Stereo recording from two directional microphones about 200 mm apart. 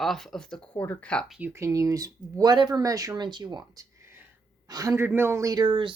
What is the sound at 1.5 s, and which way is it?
A woman's voice, 15° right (ahead or behind).